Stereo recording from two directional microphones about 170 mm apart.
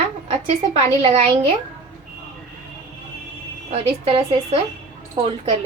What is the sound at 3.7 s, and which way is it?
Speech, 35° right (ahead or behind).